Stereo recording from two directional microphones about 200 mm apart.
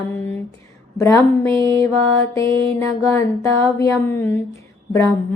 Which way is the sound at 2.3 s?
15° left (ahead or behind).